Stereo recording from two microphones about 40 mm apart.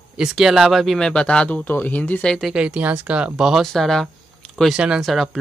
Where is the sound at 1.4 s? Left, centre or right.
Left.